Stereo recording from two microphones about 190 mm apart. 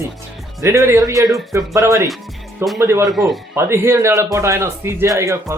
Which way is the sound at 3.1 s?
Centre (ahead or behind).